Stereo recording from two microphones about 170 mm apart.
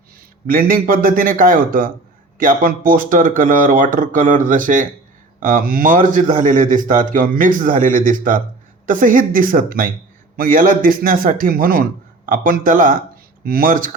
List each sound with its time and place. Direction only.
0.4 s a man's voice: 55° right (ahead or behind)